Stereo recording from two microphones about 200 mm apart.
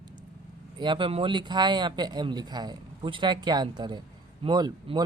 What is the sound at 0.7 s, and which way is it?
Speech, 25° right (ahead or behind).